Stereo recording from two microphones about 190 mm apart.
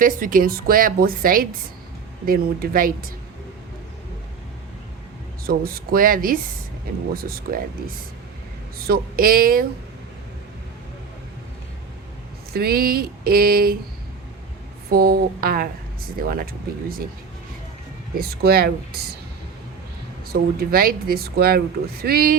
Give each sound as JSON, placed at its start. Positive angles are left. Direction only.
{"t": 0.0, "sound": "speech", "side_deg": -45}
{"t": 5.5, "sound": "speech", "side_deg": -50}
{"t": 12.5, "sound": "speech", "side_deg": -55}
{"t": 14.8, "sound": "speech", "side_deg": -55}
{"t": 18.1, "sound": "speech", "side_deg": -50}
{"t": 20.2, "sound": "speech", "side_deg": -55}